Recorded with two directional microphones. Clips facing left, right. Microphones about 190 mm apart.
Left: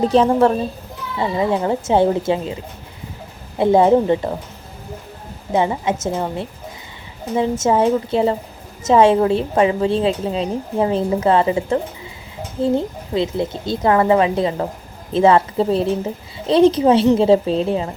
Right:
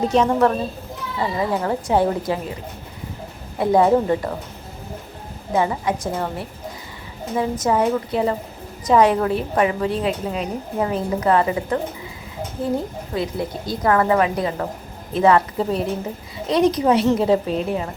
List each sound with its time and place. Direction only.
0.1 s a woman's voice: 30° left (ahead or behind)
3.6 s a woman's voice: 25° left (ahead or behind)
5.5 s a woman's voice: 25° left (ahead or behind)